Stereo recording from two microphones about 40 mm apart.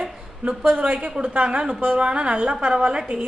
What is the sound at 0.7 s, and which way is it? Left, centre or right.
A woman's voice, right.